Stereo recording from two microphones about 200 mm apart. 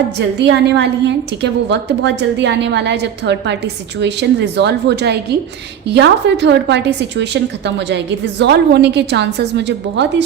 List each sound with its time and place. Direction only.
0.2 s a woman's voice: 60° right (ahead or behind)